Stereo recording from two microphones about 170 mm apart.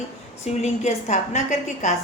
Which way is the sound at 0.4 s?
40° left (ahead or behind).